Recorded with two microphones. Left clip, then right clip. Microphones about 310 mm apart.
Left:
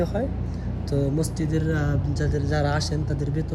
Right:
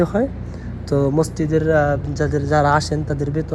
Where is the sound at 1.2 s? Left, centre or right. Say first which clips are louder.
Right 9 dB; centre.